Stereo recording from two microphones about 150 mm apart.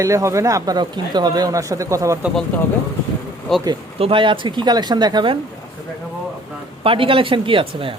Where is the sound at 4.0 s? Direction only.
35° right (ahead or behind).